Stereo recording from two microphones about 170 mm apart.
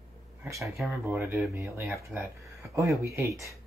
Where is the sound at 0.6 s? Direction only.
Centre (ahead or behind).